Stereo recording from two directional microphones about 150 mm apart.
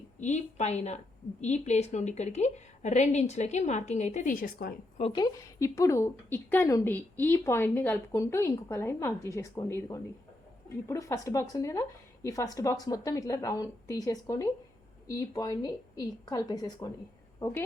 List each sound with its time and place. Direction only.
0.2 s a woman's voice: 50° left (ahead or behind); by 4.7 s 85° left
5.1 s a woman's voice: 25° left (ahead or behind)